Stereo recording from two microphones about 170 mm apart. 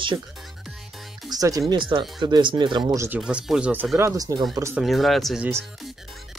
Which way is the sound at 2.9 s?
15° right (ahead or behind).